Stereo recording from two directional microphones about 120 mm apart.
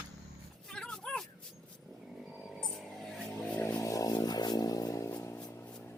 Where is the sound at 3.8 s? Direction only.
30° left (ahead or behind).